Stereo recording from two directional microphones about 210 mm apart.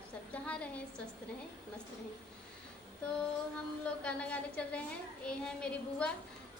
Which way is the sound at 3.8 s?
5° left (ahead or behind).